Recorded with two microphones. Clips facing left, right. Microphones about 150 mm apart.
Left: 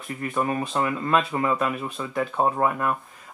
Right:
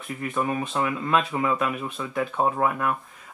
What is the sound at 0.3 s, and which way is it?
Speech, centre (ahead or behind).